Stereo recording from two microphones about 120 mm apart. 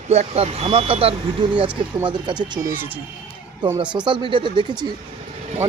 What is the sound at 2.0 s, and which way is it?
Speech, 40° right (ahead or behind).